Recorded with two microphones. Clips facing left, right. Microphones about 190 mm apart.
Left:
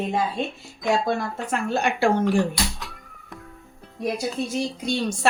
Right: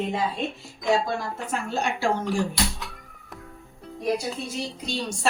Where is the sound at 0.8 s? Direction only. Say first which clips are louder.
Left 1 dB; 60° left (ahead or behind).